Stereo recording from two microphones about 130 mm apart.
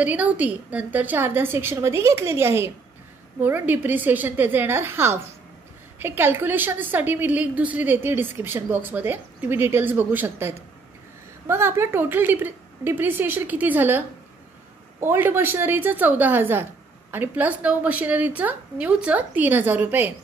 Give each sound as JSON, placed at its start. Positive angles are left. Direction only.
{"t": 0.0, "sound": "a woman's voice", "side_deg": -10}